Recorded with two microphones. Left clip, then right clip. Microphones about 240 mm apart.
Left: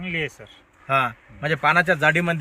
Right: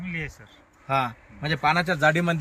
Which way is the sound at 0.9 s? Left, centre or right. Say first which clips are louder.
Left 4 dB; centre.